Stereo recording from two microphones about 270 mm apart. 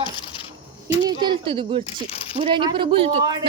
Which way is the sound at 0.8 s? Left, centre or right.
Centre.